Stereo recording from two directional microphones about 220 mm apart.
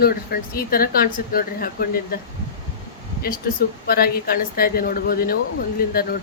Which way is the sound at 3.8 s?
45° left (ahead or behind).